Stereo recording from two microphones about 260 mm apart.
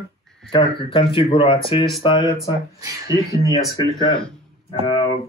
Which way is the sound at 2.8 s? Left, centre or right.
Centre.